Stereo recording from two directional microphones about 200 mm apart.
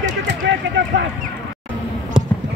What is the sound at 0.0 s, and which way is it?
Vehicle, 65° right (ahead or behind).